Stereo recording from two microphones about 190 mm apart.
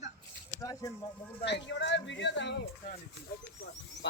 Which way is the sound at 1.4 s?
65° left (ahead or behind).